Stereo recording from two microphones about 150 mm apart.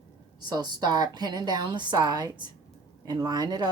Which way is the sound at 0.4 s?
25° right (ahead or behind).